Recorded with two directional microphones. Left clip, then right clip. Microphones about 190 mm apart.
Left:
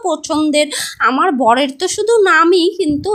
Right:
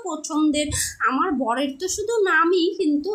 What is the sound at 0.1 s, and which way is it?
A woman's voice, 40° left (ahead or behind).